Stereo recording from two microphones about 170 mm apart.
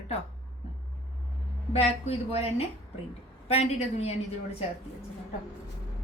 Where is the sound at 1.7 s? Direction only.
35° left (ahead or behind).